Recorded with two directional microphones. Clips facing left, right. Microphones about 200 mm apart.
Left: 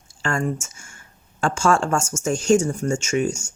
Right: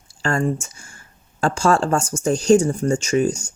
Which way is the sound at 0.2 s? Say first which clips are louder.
Right 3 dB; 35° right (ahead or behind).